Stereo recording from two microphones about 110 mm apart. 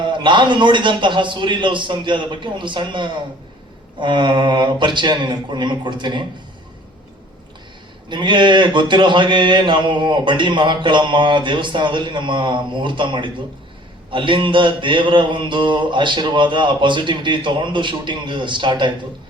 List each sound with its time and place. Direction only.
0.0 s speech: 45° right (ahead or behind)
8.1 s speech: 45° right (ahead or behind)